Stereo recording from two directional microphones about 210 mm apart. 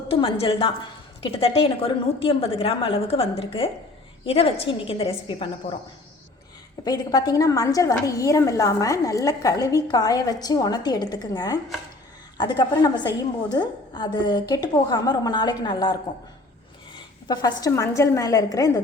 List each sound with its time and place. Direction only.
0.1 s a woman's voice: 25° left (ahead or behind)
6.8 s a woman's voice: 20° left (ahead or behind)
17.2 s a woman's voice: 20° left (ahead or behind)